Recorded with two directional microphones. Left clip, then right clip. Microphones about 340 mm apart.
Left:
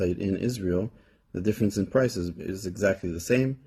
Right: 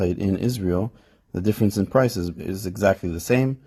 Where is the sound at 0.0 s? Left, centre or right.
Centre.